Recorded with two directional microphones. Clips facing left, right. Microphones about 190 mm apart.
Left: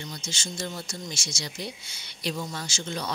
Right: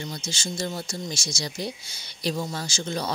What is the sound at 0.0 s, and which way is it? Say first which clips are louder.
Speech: right 4 dB; 35° right (ahead or behind).